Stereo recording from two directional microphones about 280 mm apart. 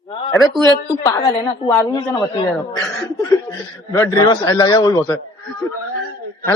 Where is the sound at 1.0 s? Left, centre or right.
Centre.